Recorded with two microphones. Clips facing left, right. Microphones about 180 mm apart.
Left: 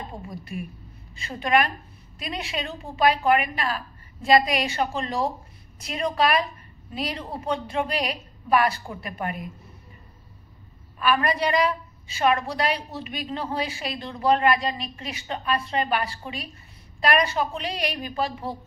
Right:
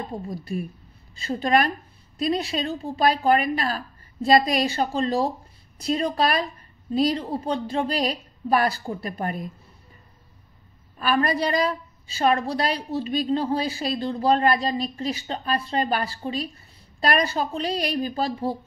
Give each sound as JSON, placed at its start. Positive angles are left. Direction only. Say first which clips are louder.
{"t": 0.3, "sound": "a woman's voice", "louder": "right 4 dB", "side_deg": -35}
{"t": 11.0, "sound": "a woman's voice", "louder": "right 1 dB", "side_deg": -35}